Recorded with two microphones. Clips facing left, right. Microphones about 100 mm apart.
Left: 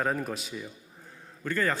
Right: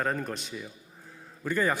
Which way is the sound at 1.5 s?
15° right (ahead or behind).